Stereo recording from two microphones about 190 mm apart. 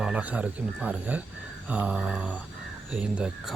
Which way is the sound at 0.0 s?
5° right (ahead or behind).